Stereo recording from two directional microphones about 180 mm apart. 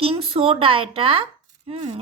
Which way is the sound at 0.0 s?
30° right (ahead or behind).